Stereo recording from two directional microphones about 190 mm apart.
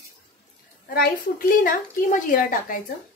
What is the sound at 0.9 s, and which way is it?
A woman's voice, 45° left (ahead or behind).